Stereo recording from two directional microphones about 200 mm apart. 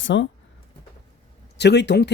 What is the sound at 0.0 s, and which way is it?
Speech, 65° left (ahead or behind).